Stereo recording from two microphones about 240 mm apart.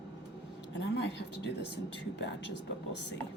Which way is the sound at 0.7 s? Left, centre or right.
Left.